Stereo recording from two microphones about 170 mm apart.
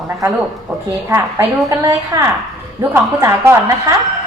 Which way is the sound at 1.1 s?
15° right (ahead or behind).